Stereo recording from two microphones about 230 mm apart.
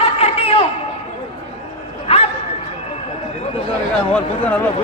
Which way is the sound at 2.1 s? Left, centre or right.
Left.